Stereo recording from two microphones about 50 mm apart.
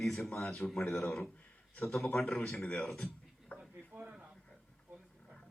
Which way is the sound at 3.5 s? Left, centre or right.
Left.